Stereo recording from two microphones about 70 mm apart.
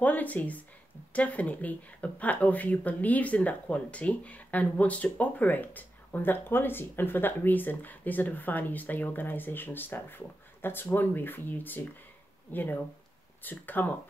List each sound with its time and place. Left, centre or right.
0.0 s speech: left